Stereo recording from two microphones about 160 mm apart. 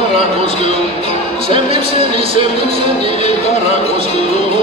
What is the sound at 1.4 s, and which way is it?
Music, 35° right (ahead or behind).